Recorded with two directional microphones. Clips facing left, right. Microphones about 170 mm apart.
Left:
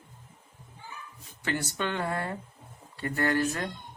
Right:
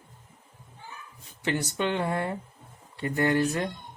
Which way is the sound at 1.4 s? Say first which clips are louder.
Right 3 dB; 15° right (ahead or behind).